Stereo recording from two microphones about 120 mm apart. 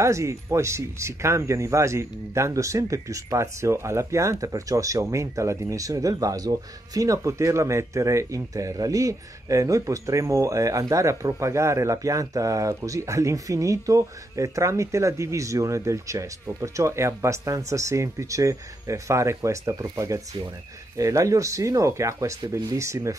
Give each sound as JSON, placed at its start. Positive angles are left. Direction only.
{"t": 0.0, "sound": "speech", "side_deg": -25}